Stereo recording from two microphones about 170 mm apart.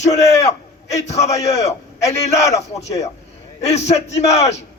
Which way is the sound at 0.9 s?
40° left (ahead or behind).